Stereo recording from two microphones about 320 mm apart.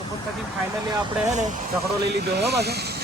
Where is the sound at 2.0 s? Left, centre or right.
Right.